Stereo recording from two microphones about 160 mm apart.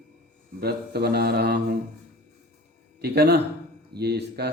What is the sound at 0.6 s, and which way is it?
Speech, 80° right.